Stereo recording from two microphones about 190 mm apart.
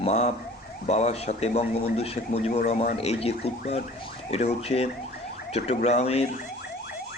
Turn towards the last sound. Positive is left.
turn(degrees=35)  # may be behind; listen again after turning